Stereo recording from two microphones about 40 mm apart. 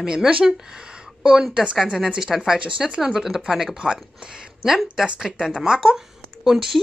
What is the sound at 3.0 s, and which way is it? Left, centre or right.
Speech, centre.